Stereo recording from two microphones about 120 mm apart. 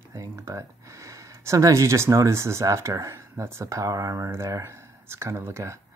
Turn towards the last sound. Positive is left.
turn(degrees=-25)  # may be behind; listen again after turning